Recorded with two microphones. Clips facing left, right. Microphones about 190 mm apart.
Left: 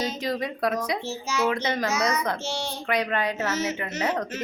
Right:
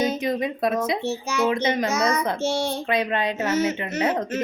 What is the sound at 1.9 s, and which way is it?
Speech, 55° right (ahead or behind).